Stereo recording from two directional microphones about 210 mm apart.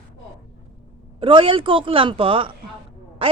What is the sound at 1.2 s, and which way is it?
A woman's voice, 25° right (ahead or behind).